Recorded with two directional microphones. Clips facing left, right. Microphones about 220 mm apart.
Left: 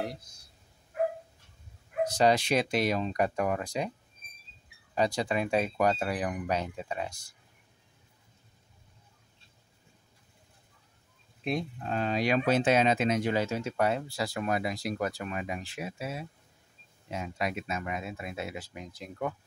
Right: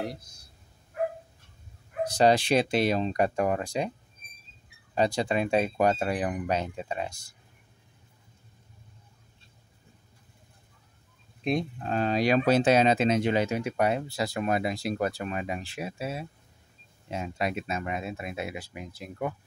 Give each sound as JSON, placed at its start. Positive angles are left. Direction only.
{"t": 2.0, "sound": "speech", "side_deg": -30}
{"t": 4.9, "sound": "speech", "side_deg": -25}
{"t": 11.4, "sound": "speech", "side_deg": -35}